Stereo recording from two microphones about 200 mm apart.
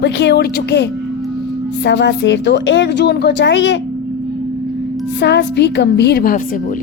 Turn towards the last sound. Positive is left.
turn(degrees=50)  # may be behind; listen again after turning